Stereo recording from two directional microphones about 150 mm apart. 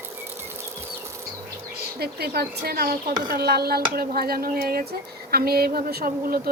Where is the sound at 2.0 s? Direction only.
90° right.